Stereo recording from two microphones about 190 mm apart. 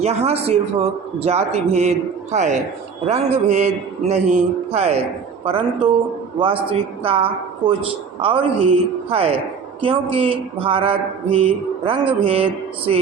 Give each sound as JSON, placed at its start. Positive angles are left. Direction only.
{"t": 0.0, "sound": "a man's voice", "side_deg": -35}
{"t": 5.5, "sound": "mantra", "side_deg": -30}